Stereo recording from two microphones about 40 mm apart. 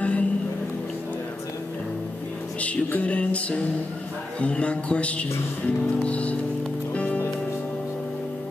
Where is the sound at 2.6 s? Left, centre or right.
Left.